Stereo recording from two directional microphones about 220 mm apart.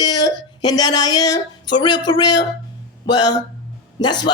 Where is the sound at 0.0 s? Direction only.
20° left (ahead or behind).